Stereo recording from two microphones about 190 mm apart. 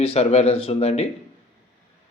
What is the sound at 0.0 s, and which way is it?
Speech, 35° left (ahead or behind).